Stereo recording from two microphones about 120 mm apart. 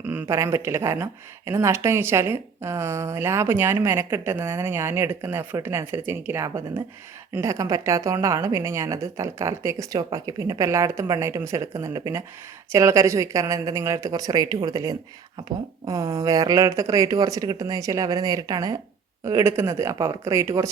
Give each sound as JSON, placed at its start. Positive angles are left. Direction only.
{"t": 0.0, "sound": "a woman's voice", "side_deg": -15}